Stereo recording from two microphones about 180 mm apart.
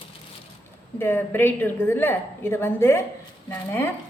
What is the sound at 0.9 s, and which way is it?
A woman's voice, 10° left (ahead or behind).